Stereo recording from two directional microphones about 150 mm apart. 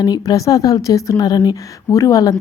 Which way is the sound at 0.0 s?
25° left (ahead or behind).